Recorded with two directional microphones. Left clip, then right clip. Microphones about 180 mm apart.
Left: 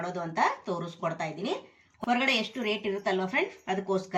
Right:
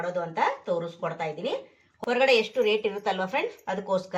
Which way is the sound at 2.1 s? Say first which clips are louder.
Right 5 dB; 25° right (ahead or behind).